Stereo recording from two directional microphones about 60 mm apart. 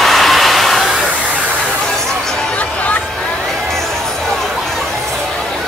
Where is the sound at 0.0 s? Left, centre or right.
Centre.